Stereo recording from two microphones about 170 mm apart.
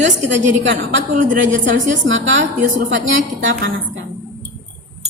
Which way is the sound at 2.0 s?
90° right.